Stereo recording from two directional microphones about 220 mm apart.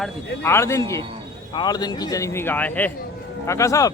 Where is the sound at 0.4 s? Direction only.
10° left (ahead or behind).